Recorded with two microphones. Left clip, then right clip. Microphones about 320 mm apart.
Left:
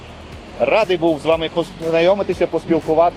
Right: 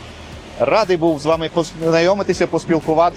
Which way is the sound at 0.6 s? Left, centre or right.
Right.